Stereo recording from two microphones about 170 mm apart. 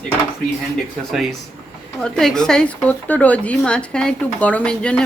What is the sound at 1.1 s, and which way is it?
Speech, centre (ahead or behind).